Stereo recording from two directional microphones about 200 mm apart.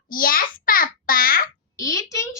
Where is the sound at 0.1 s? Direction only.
45° left (ahead or behind).